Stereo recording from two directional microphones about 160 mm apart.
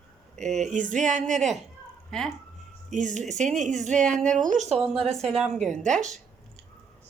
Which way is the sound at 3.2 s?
Centre (ahead or behind).